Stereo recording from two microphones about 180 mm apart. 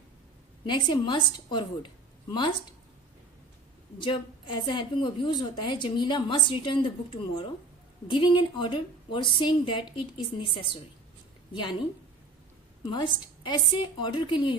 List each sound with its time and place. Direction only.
0.7 s a woman's voice: 25° left (ahead or behind)
4.0 s a woman's voice: 25° left (ahead or behind)
12.8 s a woman's voice: 25° left (ahead or behind)